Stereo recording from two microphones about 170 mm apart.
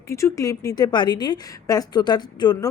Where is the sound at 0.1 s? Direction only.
15° left (ahead or behind).